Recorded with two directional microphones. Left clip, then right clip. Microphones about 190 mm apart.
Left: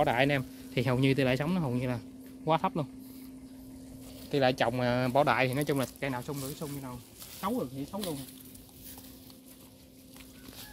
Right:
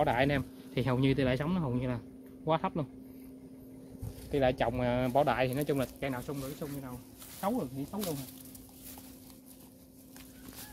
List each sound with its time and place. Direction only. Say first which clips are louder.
0.0 s speech: left 2 dB; 20° left (ahead or behind)
4.3 s speech: left 2 dB; 20° left (ahead or behind)
7.3 s speech: even; 15° right (ahead or behind)